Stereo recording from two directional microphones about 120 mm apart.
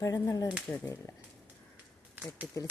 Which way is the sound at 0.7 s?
20° left (ahead or behind).